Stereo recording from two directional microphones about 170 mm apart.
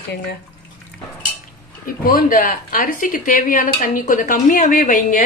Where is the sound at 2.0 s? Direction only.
55° left (ahead or behind).